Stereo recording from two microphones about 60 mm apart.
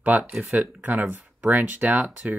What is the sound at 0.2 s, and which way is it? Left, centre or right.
Speech, centre.